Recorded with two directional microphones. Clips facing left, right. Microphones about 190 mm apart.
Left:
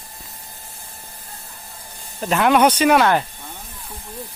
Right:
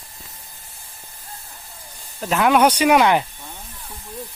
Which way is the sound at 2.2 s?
Centre (ahead or behind).